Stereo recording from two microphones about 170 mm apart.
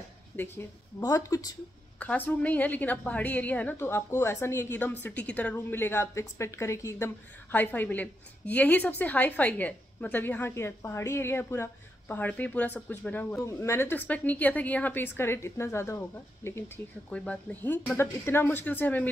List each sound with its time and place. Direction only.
0.4 s a woman's voice: 15° left (ahead or behind)
2.0 s a woman's voice: 10° left (ahead or behind)